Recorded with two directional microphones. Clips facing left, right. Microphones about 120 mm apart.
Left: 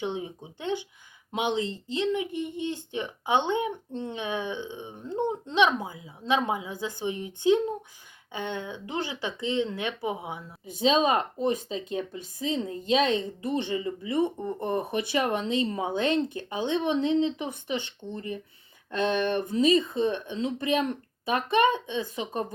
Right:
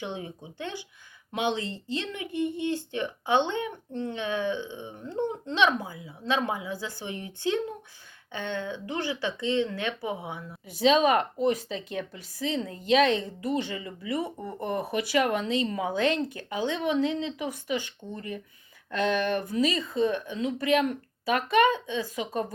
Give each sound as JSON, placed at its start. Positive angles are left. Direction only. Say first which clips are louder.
{"t": 0.0, "sound": "speech", "louder": "left 3 dB", "side_deg": 20}